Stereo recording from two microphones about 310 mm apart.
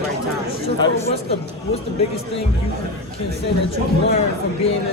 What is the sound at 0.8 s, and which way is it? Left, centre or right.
Speech, centre.